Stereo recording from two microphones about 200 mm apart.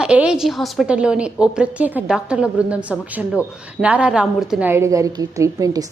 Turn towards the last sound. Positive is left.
turn(degrees=-15)  # may be behind; listen again after turning